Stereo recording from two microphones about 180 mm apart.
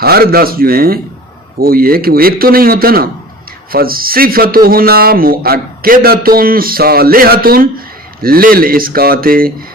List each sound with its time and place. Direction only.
0.0 s speech: 60° right (ahead or behind)